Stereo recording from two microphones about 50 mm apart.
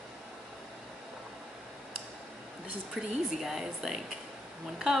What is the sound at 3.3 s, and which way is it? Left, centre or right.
Speech, centre.